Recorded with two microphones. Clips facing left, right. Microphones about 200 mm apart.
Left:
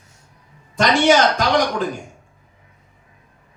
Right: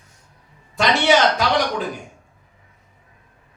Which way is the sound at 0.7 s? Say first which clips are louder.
Left 2 dB; 45° left (ahead or behind).